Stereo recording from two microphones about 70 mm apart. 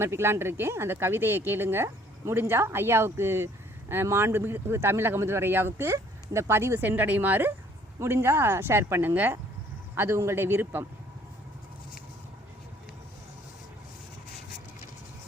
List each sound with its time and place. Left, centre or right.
0.0 s speech: right
7.9 s a man's voice: right